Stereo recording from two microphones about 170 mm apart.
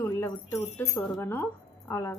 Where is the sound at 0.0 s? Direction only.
15° left (ahead or behind).